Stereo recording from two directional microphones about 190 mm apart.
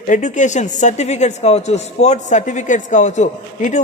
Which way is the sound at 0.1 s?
40° left (ahead or behind).